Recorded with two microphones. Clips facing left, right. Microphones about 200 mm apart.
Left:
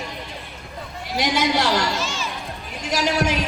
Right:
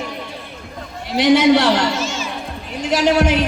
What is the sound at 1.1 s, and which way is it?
A woman's voice, 60° right (ahead or behind).